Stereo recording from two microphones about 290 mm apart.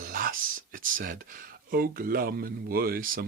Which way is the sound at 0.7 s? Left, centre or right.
Right.